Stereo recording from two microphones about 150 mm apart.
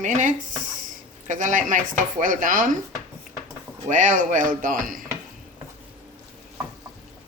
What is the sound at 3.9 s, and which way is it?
Speech, 60° right (ahead or behind).